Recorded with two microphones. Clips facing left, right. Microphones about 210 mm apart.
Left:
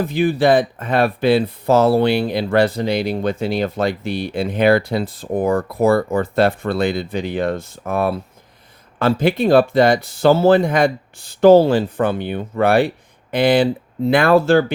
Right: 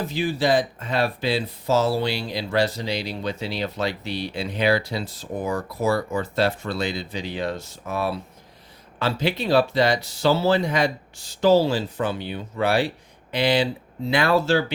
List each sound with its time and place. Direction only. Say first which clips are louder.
0.0 s speech: left 7 dB; 55° left (ahead or behind)